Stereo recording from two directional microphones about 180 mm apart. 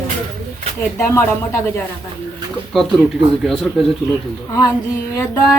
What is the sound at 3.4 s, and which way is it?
Speech, centre (ahead or behind).